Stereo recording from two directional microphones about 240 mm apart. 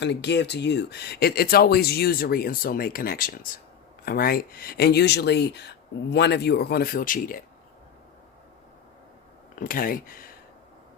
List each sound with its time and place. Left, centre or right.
0.0 s speech: left
9.6 s speech: left